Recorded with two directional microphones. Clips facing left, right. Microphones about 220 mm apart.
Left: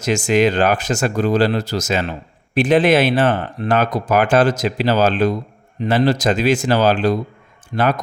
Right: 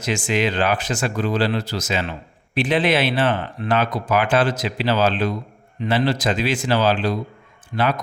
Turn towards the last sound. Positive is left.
turn(degrees=45)  # may be behind; listen again after turning